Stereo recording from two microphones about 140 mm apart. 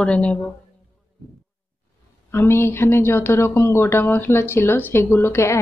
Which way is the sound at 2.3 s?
15° left (ahead or behind).